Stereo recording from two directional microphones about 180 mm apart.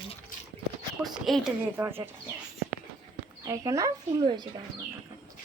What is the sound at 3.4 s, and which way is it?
A woman's voice, 20° right (ahead or behind).